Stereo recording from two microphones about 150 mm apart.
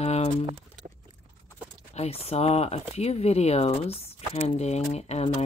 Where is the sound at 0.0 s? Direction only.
45° left (ahead or behind).